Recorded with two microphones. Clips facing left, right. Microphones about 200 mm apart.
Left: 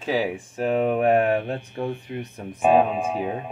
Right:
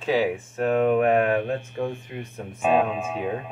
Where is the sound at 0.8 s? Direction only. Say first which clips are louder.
Even; 35° left (ahead or behind).